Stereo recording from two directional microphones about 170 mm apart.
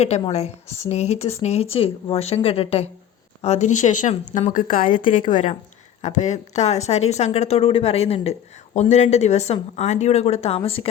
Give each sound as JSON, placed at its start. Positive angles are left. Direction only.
{"t": 0.0, "sound": "a woman's voice", "side_deg": 40}